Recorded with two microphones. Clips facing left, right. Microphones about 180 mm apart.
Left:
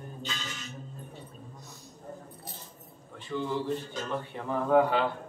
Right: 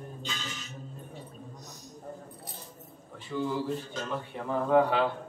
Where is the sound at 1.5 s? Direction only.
40° right (ahead or behind).